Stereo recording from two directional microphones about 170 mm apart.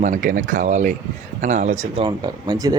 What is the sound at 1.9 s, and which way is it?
Speech, 25° right (ahead or behind).